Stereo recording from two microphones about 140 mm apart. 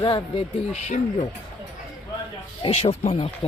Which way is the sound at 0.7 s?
55° left (ahead or behind).